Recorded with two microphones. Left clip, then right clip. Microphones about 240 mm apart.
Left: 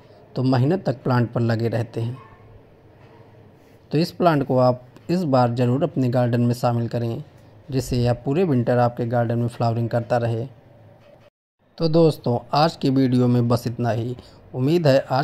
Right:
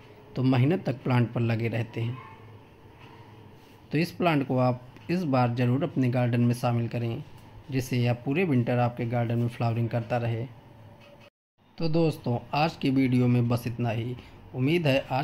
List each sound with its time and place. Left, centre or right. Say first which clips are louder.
0.3 s speech: left 5 dB; centre
3.9 s speech: left 7 dB; centre
11.7 s speech: left 9 dB; left